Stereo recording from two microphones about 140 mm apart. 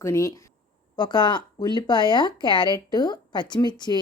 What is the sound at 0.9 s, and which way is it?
A woman's voice, 30° left (ahead or behind).